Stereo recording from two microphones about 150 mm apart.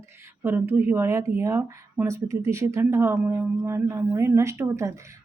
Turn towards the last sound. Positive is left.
turn(degrees=-20)  # may be behind; listen again after turning